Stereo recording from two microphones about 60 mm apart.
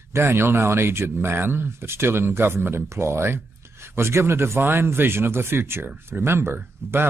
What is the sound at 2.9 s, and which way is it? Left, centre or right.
Speech, right.